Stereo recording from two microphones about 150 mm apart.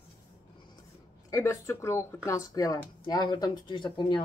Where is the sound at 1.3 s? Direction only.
20° left (ahead or behind).